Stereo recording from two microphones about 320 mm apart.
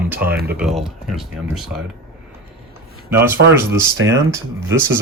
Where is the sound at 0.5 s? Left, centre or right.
Centre.